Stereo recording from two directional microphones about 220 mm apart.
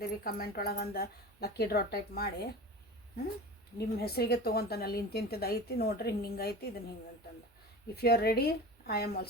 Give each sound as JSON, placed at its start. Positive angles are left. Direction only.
{"t": 0.3, "sound": "a woman's voice", "side_deg": 45}
{"t": 3.8, "sound": "a woman's voice", "side_deg": 45}
{"t": 8.0, "sound": "a woman's voice", "side_deg": 45}